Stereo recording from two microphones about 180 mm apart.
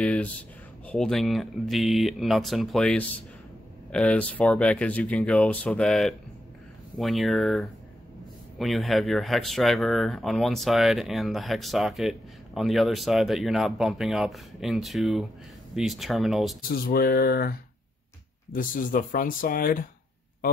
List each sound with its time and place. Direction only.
0.0 s a sound: 5° left (ahead or behind)
0.8 s speech: 5° left (ahead or behind)
16.8 s speech: 60° left (ahead or behind)